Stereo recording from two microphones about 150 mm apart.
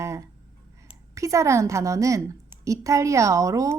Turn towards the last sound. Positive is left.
turn(degrees=-20)  # may be behind; listen again after turning